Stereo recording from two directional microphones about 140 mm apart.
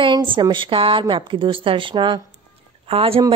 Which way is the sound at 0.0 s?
35° right (ahead or behind).